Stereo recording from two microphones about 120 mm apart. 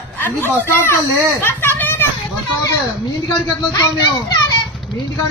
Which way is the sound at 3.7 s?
30° left (ahead or behind).